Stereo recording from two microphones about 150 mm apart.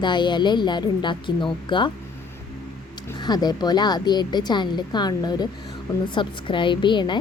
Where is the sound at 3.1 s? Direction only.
25° left (ahead or behind).